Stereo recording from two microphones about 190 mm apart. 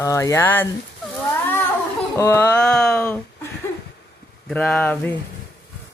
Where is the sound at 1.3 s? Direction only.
10° left (ahead or behind).